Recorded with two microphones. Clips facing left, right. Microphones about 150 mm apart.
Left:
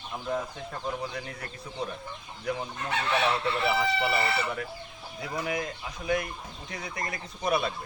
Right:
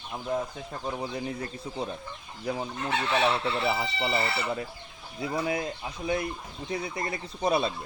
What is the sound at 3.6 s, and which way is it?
Speech, 25° right (ahead or behind).